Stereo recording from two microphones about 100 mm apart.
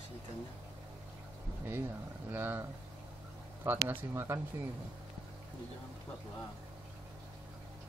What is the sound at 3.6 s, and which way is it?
Speech, 20° right (ahead or behind).